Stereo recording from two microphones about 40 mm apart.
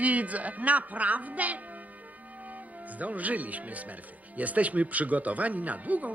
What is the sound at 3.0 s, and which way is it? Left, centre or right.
Speech, right.